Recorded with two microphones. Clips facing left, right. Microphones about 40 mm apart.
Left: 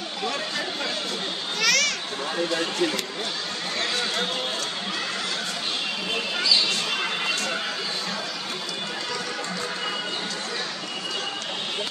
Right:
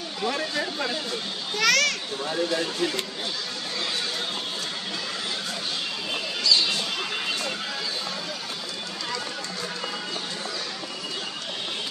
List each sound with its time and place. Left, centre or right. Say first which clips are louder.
0.2 s a sound: right 2 dB; centre
1.6 s children playing: right 1 dB; centre
2.5 s speech: left 1 dB; left